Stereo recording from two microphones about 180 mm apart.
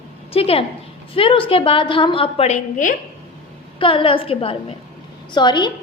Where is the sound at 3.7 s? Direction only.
30° left (ahead or behind).